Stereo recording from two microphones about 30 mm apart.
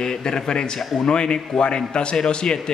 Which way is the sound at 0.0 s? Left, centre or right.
Left.